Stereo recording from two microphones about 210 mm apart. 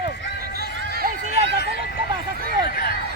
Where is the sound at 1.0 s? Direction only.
45° right (ahead or behind).